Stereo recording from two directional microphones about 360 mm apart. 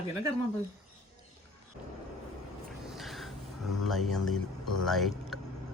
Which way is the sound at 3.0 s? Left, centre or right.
Centre.